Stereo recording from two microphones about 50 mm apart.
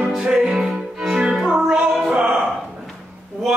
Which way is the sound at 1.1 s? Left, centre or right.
Centre.